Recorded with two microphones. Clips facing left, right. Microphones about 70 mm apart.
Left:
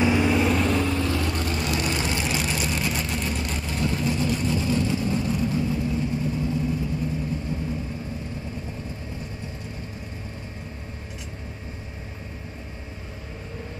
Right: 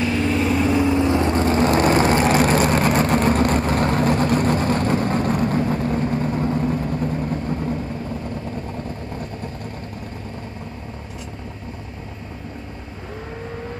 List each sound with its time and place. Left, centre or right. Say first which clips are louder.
0.0 s vehicle: even; centre; by 7.7 s right